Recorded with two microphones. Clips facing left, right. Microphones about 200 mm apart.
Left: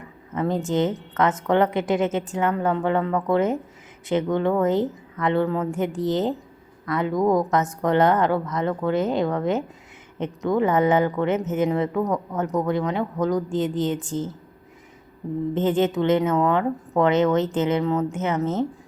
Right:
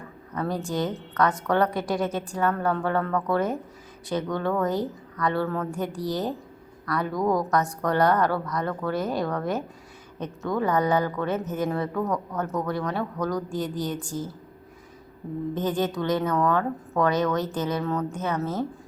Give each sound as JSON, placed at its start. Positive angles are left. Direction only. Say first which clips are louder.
{"t": 0.0, "sound": "a woman's voice", "louder": "left 4 dB", "side_deg": 20}
{"t": 15.5, "sound": "a woman's voice", "louder": "left 6 dB", "side_deg": 25}